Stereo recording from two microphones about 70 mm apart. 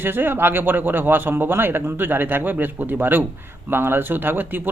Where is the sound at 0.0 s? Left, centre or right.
Right.